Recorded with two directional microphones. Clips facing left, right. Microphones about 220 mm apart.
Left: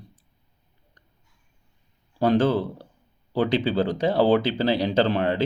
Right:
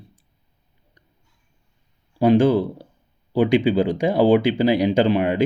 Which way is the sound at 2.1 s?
10° right (ahead or behind).